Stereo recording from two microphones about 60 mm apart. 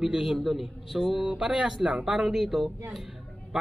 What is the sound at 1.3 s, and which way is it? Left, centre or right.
Speech, centre.